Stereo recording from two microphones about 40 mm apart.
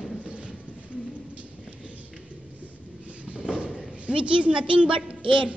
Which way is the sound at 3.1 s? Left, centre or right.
Right.